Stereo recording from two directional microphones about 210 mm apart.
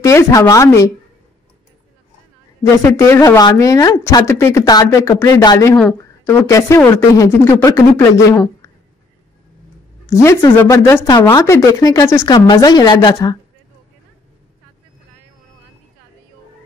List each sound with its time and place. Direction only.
0.0 s speech: 15° left (ahead or behind)
2.8 s speech: 15° left (ahead or behind)
10.0 s speech: 15° left (ahead or behind)